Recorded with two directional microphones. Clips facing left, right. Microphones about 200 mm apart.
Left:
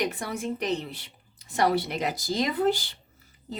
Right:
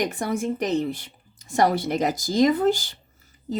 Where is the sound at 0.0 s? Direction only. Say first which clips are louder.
Right 5 dB; 45° right (ahead or behind).